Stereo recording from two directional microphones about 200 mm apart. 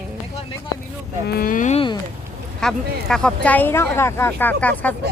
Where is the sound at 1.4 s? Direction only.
40° left (ahead or behind).